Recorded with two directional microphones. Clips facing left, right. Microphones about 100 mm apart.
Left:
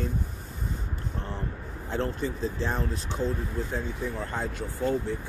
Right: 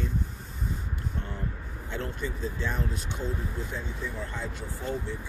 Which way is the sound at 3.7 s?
50° left (ahead or behind).